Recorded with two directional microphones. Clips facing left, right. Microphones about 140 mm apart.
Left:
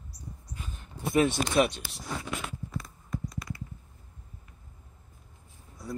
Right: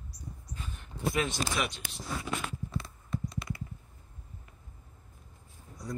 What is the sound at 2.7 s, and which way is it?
Clip-clop, 25° right (ahead or behind).